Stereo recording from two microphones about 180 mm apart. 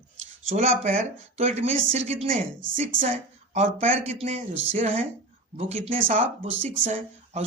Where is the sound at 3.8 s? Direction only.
35° right (ahead or behind).